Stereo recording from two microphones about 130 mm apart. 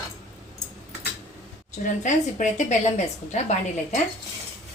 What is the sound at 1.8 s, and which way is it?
A woman's voice, 70° left (ahead or behind).